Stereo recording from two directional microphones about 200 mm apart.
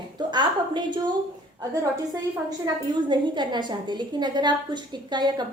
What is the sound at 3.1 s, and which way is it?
A woman's voice, 20° right (ahead or behind).